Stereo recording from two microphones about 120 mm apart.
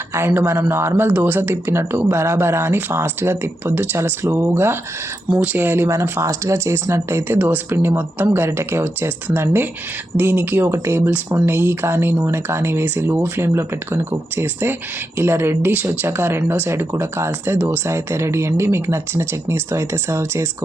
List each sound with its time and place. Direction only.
0.1 s speech: 20° right (ahead or behind)